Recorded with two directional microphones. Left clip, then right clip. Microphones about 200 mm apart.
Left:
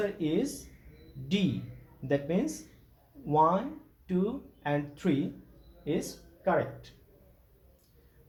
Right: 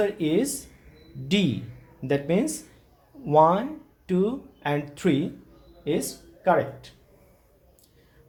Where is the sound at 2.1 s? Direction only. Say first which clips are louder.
Right 6 dB; 50° right (ahead or behind).